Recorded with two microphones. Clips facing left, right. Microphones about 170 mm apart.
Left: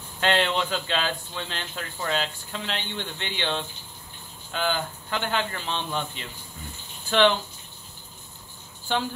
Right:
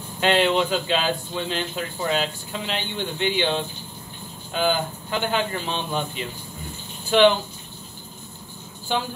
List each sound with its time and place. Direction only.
0.2 s speech: 10° right (ahead or behind)